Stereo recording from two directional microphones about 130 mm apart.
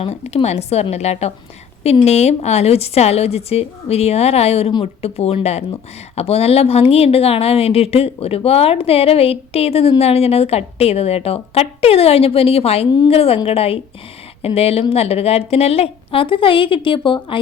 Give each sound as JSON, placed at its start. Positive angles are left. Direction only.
{"t": 0.0, "sound": "a woman's voice", "side_deg": 50}